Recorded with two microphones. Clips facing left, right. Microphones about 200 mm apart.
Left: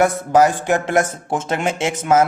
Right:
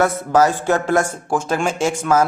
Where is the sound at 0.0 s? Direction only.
15° left (ahead or behind).